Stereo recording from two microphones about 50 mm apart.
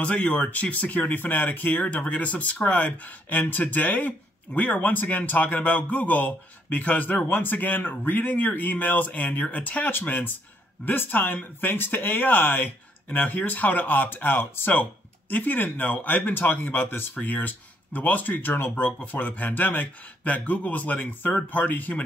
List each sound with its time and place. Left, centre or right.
0.0 s speech: left
14.7 s speech: left